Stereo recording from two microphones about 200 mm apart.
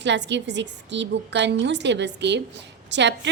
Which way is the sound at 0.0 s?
60° right (ahead or behind).